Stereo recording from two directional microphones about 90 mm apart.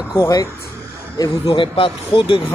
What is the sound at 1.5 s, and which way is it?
Speech, 90° left.